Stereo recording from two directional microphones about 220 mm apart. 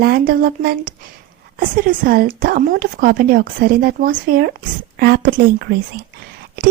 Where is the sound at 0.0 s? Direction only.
45° right (ahead or behind).